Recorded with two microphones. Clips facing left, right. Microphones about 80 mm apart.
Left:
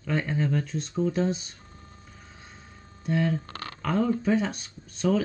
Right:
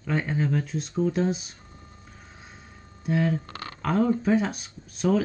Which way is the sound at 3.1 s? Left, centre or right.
Centre.